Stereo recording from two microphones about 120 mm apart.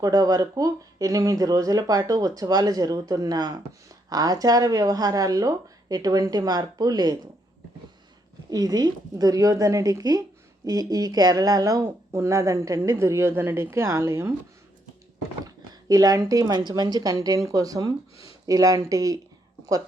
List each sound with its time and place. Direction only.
0.0 s speech: 30° right (ahead or behind)
8.4 s speech: 35° right (ahead or behind)
15.4 s speech: 30° right (ahead or behind)